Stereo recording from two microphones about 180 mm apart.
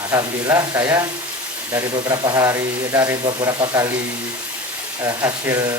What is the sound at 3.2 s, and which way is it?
Speech, 25° right (ahead or behind).